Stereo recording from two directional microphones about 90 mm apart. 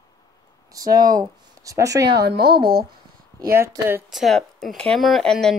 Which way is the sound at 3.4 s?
30° right (ahead or behind).